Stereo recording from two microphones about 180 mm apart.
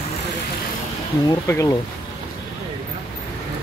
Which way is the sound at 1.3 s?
15° left (ahead or behind).